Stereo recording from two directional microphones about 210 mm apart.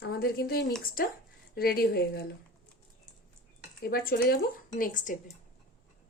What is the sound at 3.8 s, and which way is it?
Speech, 45° left (ahead or behind).